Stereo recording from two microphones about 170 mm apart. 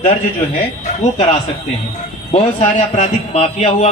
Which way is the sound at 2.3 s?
40° left (ahead or behind).